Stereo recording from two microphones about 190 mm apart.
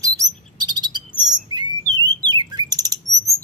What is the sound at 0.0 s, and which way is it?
Chirp, 20° right (ahead or behind).